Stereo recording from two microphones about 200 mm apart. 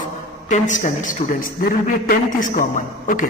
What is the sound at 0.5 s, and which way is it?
A man's voice, 40° left (ahead or behind).